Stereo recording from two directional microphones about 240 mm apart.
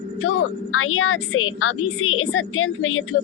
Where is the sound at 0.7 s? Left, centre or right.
Left.